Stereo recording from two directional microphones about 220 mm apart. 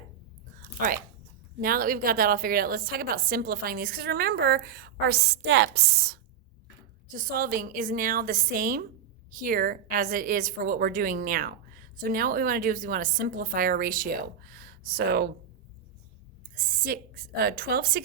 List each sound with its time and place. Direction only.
0.6 s a sound: 35° right (ahead or behind)
1.6 s a woman's voice: 40° right (ahead or behind)
16.4 s a woman's voice: 40° right (ahead or behind)